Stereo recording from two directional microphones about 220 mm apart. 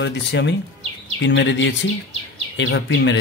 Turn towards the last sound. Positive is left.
turn(degrees=55)  # may be behind; listen again after turning